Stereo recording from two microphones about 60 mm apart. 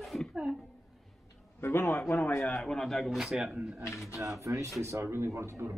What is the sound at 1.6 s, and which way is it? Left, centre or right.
A man's voice, left.